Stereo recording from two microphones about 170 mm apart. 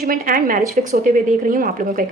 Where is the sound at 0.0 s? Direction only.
55° right (ahead or behind).